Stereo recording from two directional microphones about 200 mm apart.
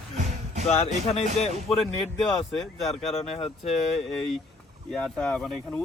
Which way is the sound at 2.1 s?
Centre (ahead or behind).